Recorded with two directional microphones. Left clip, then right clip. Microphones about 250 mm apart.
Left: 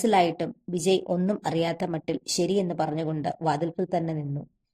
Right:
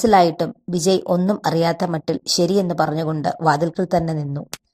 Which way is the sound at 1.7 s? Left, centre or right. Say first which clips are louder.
Right 8 dB; centre.